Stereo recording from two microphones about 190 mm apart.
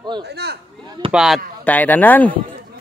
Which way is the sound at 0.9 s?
25° right (ahead or behind).